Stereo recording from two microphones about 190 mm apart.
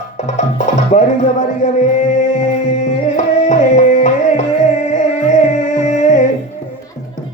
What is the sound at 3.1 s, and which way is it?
Tabla, 40° left (ahead or behind).